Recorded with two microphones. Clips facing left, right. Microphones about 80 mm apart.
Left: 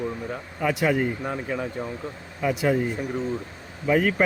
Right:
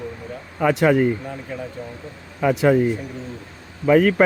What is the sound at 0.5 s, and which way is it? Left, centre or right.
Speech, right.